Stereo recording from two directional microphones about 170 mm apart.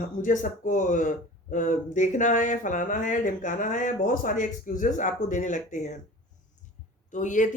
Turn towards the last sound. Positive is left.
turn(degrees=45)  # may be behind; listen again after turning